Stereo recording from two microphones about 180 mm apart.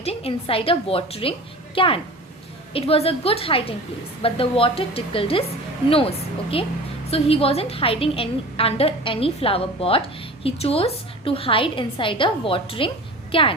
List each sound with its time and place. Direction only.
0.0 s a woman's voice: 35° left (ahead or behind)